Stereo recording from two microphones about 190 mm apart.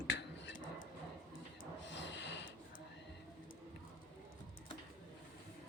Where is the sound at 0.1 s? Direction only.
70° left (ahead or behind).